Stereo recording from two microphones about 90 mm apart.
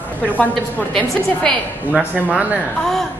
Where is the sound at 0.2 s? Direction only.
15° left (ahead or behind).